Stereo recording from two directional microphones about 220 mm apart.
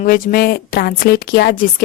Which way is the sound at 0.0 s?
40° left (ahead or behind).